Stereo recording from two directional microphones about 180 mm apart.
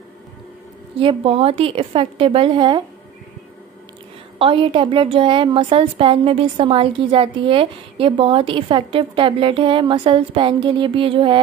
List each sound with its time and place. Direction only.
0.9 s a woman's voice: 30° right (ahead or behind)
4.4 s a woman's voice: 30° right (ahead or behind)